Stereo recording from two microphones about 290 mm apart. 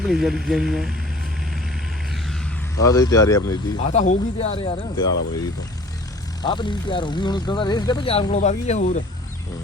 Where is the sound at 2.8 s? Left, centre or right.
Centre.